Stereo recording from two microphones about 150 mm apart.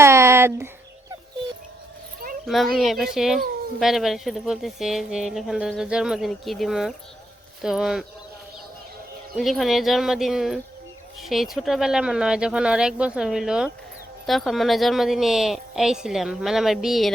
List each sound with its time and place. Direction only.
0.0 s a sound: 20° right (ahead or behind)
2.5 s speech: centre (ahead or behind)
9.3 s speech: centre (ahead or behind)